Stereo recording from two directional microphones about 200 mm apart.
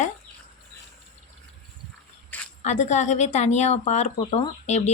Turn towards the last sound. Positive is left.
turn(degrees=35)  # may be behind; listen again after turning